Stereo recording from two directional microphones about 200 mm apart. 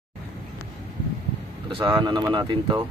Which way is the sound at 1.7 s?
25° right (ahead or behind).